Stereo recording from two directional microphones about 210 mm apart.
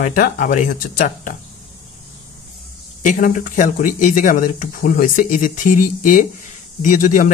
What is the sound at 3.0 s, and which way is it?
Speech, 40° left (ahead or behind).